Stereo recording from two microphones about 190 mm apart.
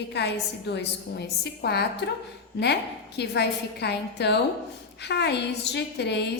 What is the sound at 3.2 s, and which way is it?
A woman's voice, 60° left (ahead or behind).